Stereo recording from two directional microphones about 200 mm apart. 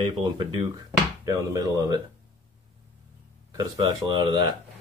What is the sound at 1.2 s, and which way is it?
Speech, 15° right (ahead or behind).